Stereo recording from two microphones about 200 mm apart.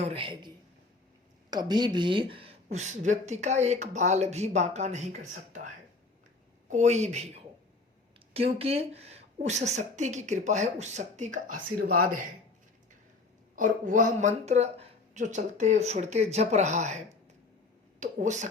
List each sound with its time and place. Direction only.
0.0 s a man's voice: 25° right (ahead or behind)
8.5 s speech: 30° right (ahead or behind)
13.6 s speech: 40° right (ahead or behind)
18.0 s speech: 35° right (ahead or behind)